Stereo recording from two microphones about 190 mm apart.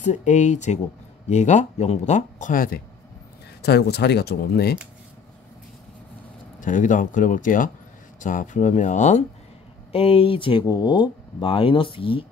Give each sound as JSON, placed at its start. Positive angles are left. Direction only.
{"t": 0.0, "sound": "speech", "side_deg": 40}
{"t": 3.6, "sound": "speech", "side_deg": 60}
{"t": 6.6, "sound": "speech", "side_deg": 45}